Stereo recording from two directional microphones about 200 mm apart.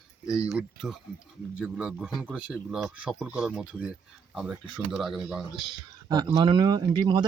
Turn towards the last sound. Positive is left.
turn(degrees=-20)  # may be behind; listen again after turning